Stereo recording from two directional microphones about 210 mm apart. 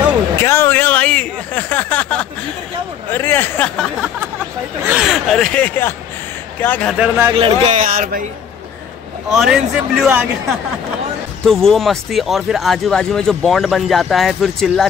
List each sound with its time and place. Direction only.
0.4 s a sound: 10° left (ahead or behind)
6.6 s speech: 5° left (ahead or behind)
7.0 s speech: 10° right (ahead or behind)
7.3 s speech: 25° right (ahead or behind)
9.3 s speech: centre (ahead or behind)
11.4 s speech: centre (ahead or behind)